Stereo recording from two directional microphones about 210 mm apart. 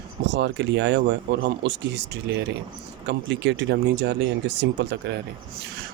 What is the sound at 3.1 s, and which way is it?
Speech, 60° right (ahead or behind).